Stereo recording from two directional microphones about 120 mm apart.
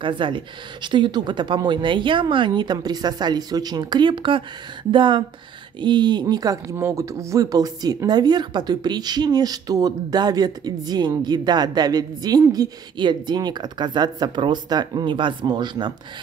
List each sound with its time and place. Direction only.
0.0 s a woman's voice: 45° right (ahead or behind)